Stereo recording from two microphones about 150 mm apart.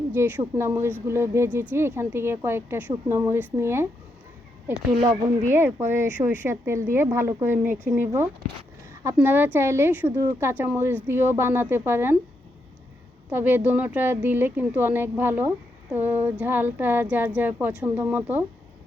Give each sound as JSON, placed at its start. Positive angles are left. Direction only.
{"t": 0.1, "sound": "speech", "side_deg": -15}
{"t": 5.5, "sound": "speech", "side_deg": -15}
{"t": 13.3, "sound": "speech", "side_deg": -10}